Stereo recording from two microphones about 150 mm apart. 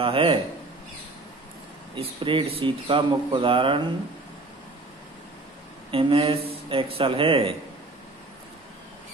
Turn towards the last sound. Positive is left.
turn(degrees=-35)  # may be behind; listen again after turning